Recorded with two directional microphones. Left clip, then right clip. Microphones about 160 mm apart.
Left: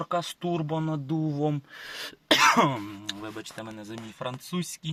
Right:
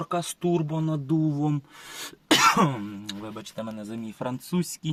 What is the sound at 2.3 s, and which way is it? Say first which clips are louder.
Cough: even; 25° left (ahead or behind).